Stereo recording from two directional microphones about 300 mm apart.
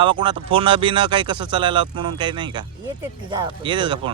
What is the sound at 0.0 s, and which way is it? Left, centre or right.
Speech, centre.